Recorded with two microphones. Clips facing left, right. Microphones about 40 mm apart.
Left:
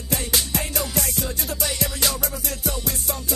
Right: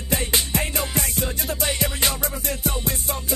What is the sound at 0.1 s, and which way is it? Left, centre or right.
Music, right.